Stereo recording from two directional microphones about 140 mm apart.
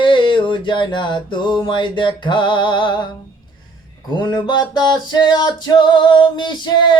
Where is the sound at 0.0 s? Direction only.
35° left (ahead or behind).